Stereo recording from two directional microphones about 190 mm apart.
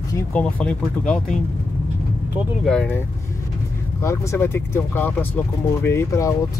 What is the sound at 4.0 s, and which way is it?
Speech, 15° left (ahead or behind).